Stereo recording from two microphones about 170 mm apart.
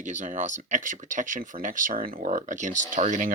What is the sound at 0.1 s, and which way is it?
Speech, 45° right (ahead or behind).